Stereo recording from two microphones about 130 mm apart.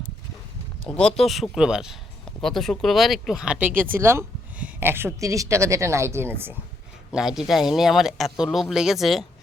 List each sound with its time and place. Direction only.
0.9 s speech: 5° left (ahead or behind); by 6.6 s 15° right (ahead or behind)
7.1 s speech: 5° right (ahead or behind)